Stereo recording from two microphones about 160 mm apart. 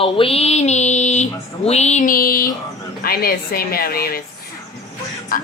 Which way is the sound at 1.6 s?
45° left (ahead or behind).